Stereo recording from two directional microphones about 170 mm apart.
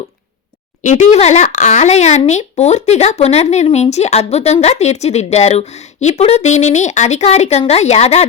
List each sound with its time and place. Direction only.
0.8 s speech: 45° left (ahead or behind)